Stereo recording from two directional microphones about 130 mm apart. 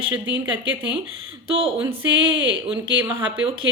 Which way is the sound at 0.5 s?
45° right (ahead or behind).